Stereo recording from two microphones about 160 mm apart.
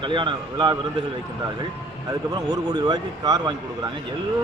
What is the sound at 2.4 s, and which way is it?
Speech, 25° right (ahead or behind).